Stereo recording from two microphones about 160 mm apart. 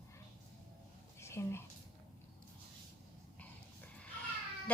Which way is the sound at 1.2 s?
15° left (ahead or behind).